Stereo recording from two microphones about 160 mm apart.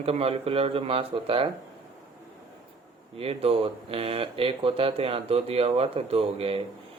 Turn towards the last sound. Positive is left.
turn(degrees=-35)  # may be behind; listen again after turning